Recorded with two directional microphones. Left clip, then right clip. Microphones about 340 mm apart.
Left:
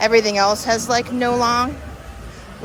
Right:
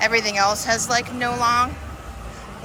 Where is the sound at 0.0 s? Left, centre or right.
Centre.